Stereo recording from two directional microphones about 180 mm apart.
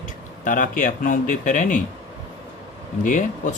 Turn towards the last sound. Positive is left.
turn(degrees=45)  # may be behind; listen again after turning